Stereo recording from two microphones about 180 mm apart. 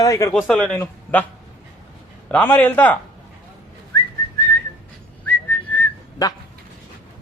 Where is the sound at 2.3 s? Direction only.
10° left (ahead or behind).